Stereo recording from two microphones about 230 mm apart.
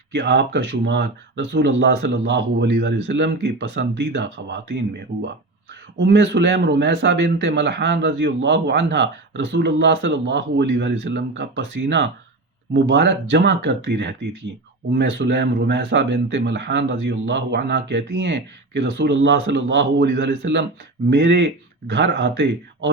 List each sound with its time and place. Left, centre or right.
0.1 s speech: right
6.0 s speech: right